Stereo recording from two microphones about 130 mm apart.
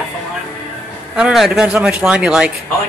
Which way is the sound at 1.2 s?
5° right (ahead or behind).